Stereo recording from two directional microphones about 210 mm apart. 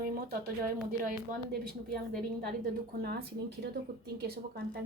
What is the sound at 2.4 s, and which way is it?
Speech, 50° right (ahead or behind).